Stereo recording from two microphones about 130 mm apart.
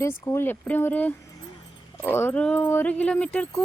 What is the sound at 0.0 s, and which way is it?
Speech, 20° left (ahead or behind).